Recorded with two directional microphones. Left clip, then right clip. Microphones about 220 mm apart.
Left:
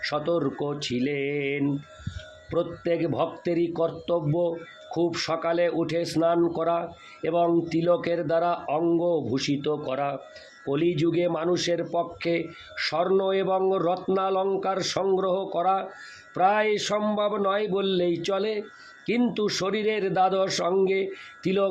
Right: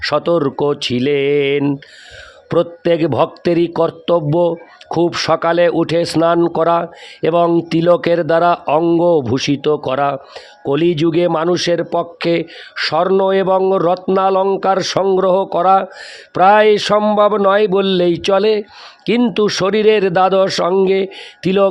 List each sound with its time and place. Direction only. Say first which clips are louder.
0.0 s speech: right 11 dB; 50° right (ahead or behind)